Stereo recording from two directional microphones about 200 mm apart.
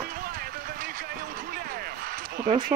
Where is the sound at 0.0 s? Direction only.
45° right (ahead or behind).